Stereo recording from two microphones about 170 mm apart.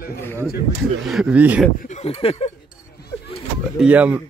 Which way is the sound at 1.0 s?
5° right (ahead or behind).